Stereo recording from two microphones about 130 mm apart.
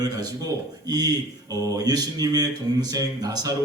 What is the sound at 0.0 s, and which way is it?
Speech, 30° right (ahead or behind).